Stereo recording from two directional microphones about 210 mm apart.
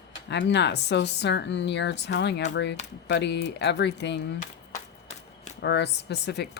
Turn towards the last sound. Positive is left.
turn(degrees=50)  # may be behind; listen again after turning